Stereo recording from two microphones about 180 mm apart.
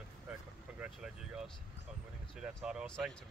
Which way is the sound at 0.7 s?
5° right (ahead or behind).